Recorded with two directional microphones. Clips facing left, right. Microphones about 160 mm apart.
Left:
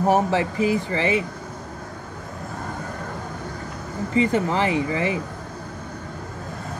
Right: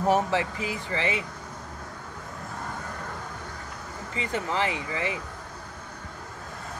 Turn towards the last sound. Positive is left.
turn(degrees=45)  # may be behind; listen again after turning